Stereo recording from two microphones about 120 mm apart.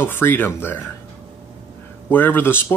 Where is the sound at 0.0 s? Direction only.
20° left (ahead or behind).